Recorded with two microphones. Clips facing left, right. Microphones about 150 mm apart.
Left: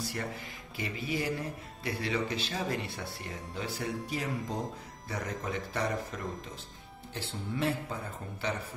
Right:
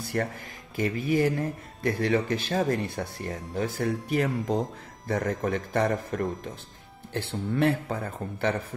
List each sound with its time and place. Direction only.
0.0 s music: 55° right (ahead or behind)
0.7 s speech: 45° right (ahead or behind)